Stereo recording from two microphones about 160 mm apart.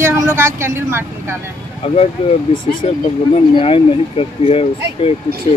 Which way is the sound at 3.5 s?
35° left (ahead or behind).